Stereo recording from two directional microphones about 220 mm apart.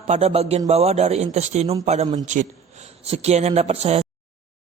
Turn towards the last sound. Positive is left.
turn(degrees=-30)  # may be behind; listen again after turning